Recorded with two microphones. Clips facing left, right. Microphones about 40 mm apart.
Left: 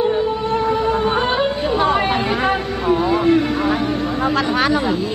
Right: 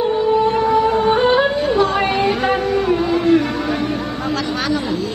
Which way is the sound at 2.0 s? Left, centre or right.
Centre.